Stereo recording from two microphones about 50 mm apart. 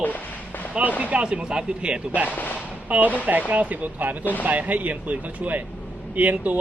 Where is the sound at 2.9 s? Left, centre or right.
Right.